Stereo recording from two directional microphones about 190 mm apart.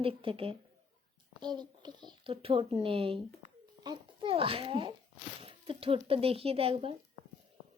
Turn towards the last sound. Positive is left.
turn(degrees=-30)  # may be behind; listen again after turning